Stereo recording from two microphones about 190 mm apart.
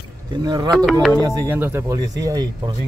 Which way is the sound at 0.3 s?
20° right (ahead or behind).